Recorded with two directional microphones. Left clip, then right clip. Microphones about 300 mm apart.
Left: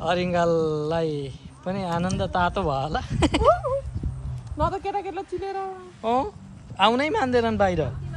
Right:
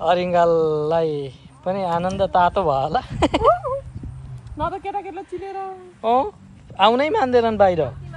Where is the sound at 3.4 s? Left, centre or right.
Right.